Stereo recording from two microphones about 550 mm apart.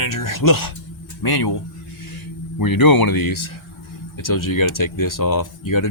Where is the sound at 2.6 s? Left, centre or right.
Left.